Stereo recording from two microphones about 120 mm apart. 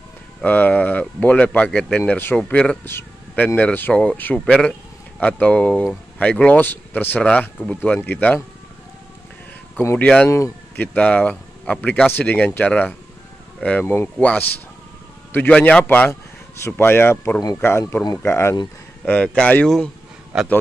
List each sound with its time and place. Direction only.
0.4 s speech: 15° left (ahead or behind)
9.8 s speech: 15° left (ahead or behind)
19.0 s speech: 10° left (ahead or behind)
20.3 s a man's voice: 5° right (ahead or behind)